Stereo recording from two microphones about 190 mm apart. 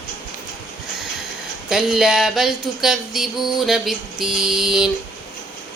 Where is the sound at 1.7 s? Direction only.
5° right (ahead or behind).